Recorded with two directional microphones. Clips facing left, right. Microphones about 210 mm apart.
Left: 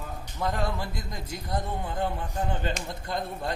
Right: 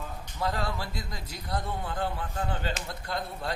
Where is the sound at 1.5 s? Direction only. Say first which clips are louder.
Left 1 dB; 20° left (ahead or behind).